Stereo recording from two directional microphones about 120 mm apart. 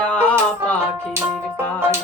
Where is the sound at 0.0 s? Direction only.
10° left (ahead or behind).